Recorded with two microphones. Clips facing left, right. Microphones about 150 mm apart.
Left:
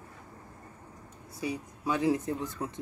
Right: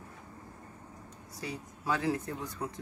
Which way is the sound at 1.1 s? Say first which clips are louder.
Left 6 dB; 10° left (ahead or behind).